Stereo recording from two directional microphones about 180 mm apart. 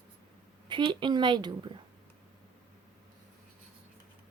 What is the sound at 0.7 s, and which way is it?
A woman's voice, 25° right (ahead or behind).